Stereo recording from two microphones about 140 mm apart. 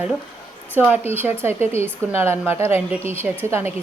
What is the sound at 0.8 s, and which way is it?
Speech, 15° right (ahead or behind).